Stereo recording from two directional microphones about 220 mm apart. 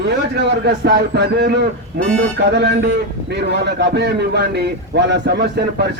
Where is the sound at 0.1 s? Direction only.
50° right (ahead or behind).